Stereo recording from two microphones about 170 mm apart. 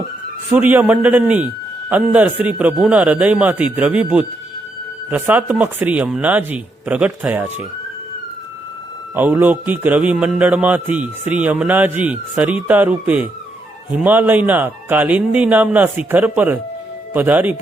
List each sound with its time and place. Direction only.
0.5 s a man's voice: 10° right (ahead or behind)
9.1 s a man's voice: 10° right (ahead or behind)